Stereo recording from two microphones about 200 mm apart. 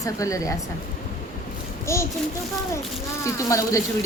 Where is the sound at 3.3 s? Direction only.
15° left (ahead or behind).